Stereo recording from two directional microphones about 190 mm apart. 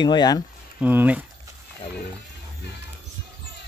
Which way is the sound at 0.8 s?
10° right (ahead or behind).